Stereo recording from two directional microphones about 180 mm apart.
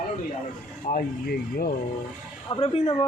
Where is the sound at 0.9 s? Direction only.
45° left (ahead or behind).